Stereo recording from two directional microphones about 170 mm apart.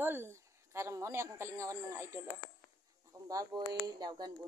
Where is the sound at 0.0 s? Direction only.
15° right (ahead or behind).